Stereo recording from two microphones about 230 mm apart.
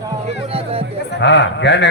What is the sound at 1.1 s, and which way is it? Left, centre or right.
Speech, left.